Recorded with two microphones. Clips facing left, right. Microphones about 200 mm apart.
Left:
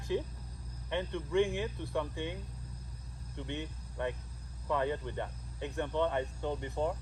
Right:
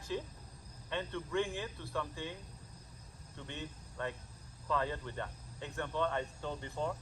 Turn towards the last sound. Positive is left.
turn(degrees=20)  # may be behind; listen again after turning